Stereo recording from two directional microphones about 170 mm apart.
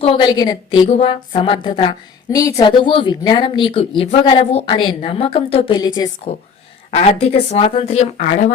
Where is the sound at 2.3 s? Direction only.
20° left (ahead or behind).